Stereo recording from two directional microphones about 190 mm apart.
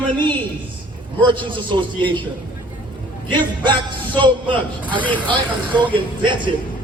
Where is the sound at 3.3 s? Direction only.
25° right (ahead or behind).